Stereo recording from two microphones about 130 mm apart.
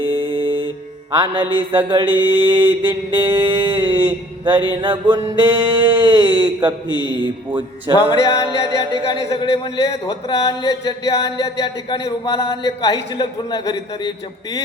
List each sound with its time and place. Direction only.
0.0 s music: 40° right (ahead or behind)
1.1 s mantra: 40° right (ahead or behind)
2.0 s mantra: 15° right (ahead or behind)
2.5 s mantra: 35° right (ahead or behind)
7.9 s a man's voice: 30° left (ahead or behind)
8.4 s mantra: 35° right (ahead or behind)
9.3 s a man's voice: 35° left (ahead or behind)
11.6 s speech: 40° left (ahead or behind)
12.2 s a man's voice: 30° left (ahead or behind)